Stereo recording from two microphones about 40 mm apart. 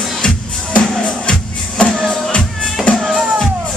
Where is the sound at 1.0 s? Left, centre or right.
Left.